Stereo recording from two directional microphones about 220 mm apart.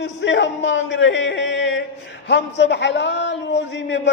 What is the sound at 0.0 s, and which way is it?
A man's voice, 55° left (ahead or behind).